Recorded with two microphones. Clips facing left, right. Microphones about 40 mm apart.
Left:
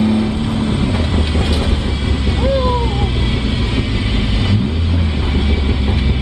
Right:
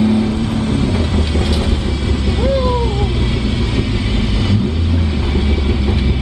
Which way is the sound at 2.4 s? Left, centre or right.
Centre.